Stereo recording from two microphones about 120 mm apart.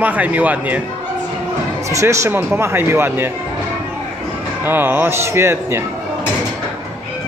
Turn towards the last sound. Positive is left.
turn(degrees=-20)  # may be behind; listen again after turning